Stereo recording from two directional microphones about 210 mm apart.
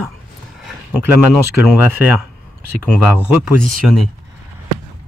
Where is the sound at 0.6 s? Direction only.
10° right (ahead or behind).